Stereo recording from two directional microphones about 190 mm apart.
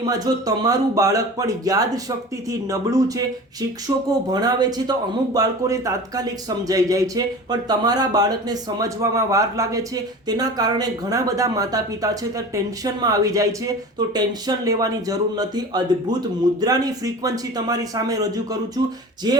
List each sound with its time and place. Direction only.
0.1 s speech: 20° right (ahead or behind)